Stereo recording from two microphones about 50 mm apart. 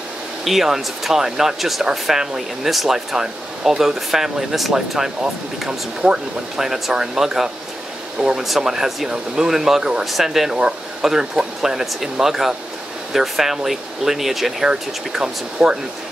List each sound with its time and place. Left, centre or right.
0.5 s speech: centre
14.7 s speech: centre